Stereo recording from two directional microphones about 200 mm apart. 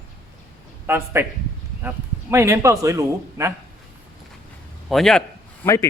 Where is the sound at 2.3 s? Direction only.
15° right (ahead or behind).